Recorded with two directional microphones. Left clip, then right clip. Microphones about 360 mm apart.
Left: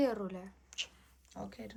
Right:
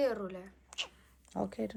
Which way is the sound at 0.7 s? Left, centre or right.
Centre.